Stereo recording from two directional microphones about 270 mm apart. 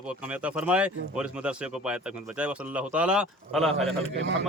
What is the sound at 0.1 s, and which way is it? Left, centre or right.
Speech, centre.